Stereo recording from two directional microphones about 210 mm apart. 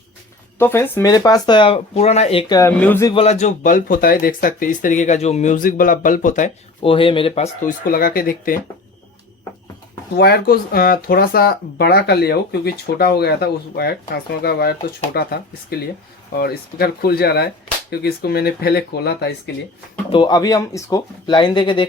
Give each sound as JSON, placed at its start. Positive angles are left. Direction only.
{"t": 0.6, "sound": "speech", "side_deg": 10}
{"t": 2.6, "sound": "a man's voice", "side_deg": 10}
{"t": 3.1, "sound": "speech", "side_deg": 30}
{"t": 6.9, "sound": "speech", "side_deg": 25}
{"t": 7.9, "sound": "speech", "side_deg": 45}
{"t": 10.2, "sound": "speech", "side_deg": 50}
{"t": 20.1, "sound": "speech", "side_deg": 20}